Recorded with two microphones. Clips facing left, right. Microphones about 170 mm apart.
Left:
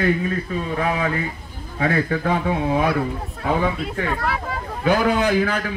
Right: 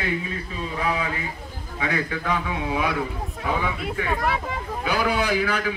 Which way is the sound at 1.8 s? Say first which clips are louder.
Left 6 dB; 45° left (ahead or behind).